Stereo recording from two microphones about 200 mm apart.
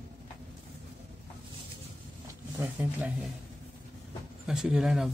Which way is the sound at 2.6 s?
10° right (ahead or behind).